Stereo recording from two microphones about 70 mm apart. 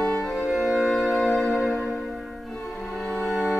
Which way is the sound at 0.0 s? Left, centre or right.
Centre.